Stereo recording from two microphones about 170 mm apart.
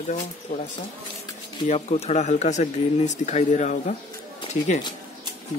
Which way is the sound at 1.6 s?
40° left (ahead or behind).